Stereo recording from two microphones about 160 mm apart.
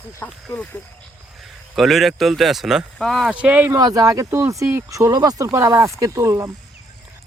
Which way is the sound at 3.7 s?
25° right (ahead or behind).